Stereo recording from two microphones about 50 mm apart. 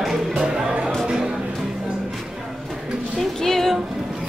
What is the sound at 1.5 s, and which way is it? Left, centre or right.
Music, centre.